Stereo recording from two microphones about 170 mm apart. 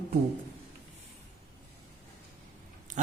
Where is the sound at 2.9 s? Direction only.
45° right (ahead or behind).